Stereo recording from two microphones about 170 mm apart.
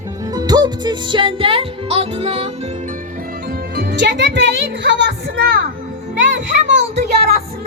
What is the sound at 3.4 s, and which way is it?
Speech, 65° right (ahead or behind).